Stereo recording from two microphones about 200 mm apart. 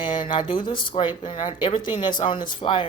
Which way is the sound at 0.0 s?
25° left (ahead or behind).